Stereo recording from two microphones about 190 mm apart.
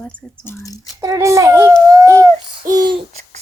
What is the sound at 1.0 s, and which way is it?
Speech, 15° right (ahead or behind).